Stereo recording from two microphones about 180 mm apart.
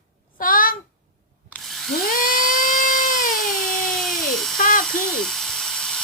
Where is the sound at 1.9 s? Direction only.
50° left (ahead or behind).